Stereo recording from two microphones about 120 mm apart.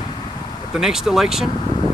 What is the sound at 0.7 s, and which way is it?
Speech, 5° right (ahead or behind).